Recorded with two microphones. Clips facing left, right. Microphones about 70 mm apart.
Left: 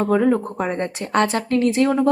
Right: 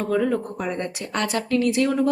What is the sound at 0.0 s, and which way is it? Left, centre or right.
Speech, left.